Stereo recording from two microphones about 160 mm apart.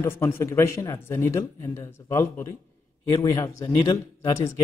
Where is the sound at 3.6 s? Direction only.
20° left (ahead or behind).